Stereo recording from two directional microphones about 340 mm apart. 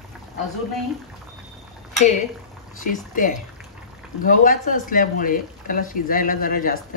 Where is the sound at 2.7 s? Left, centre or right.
Left.